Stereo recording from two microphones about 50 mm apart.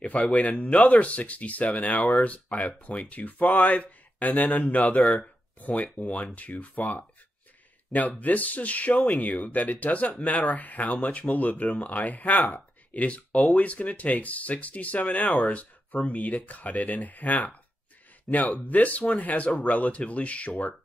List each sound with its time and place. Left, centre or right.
0.0 s speech: left